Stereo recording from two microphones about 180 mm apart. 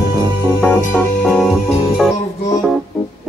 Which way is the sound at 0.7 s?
10° left (ahead or behind).